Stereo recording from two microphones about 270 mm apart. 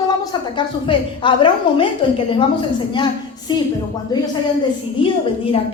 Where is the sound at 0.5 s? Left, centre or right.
Centre.